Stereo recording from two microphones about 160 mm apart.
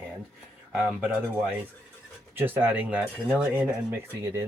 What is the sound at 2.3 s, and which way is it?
Speech, 10° right (ahead or behind).